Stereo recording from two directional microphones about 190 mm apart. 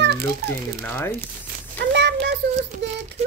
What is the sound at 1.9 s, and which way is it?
Child singing, 65° right (ahead or behind).